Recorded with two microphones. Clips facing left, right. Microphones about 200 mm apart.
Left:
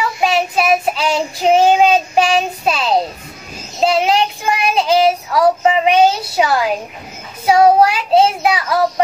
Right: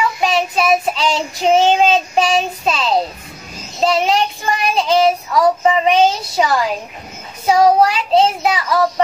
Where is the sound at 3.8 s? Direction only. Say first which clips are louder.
Left 1 dB; 5° left (ahead or behind).